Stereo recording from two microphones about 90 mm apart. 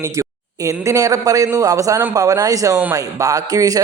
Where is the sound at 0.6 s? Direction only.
35° right (ahead or behind).